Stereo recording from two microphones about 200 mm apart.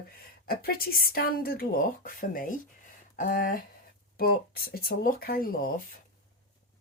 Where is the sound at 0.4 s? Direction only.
50° left (ahead or behind).